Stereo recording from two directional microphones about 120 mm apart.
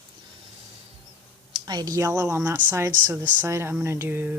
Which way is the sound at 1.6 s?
35° right (ahead or behind).